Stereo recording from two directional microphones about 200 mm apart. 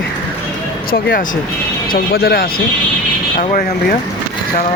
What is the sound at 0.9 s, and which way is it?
Speech, 50° left (ahead or behind).